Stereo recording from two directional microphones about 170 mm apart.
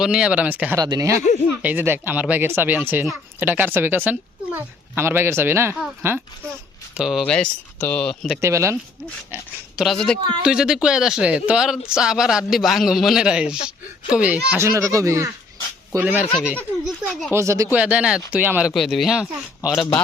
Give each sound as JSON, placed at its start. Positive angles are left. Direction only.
{"t": 0.0, "sound": "speech", "side_deg": -5}
{"t": 0.8, "sound": "a man's voice", "side_deg": -20}
{"t": 8.4, "sound": "speech", "side_deg": -15}
{"t": 9.3, "sound": "a man's voice", "side_deg": 0}
{"t": 14.5, "sound": "speech", "side_deg": -15}
{"t": 16.6, "sound": "a man's voice", "side_deg": 5}
{"t": 17.3, "sound": "a man's voice", "side_deg": -15}